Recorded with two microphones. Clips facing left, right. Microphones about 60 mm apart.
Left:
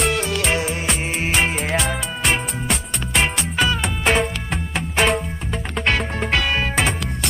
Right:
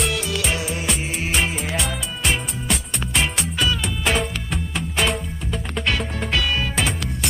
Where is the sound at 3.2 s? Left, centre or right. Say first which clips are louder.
Left 3 dB; left.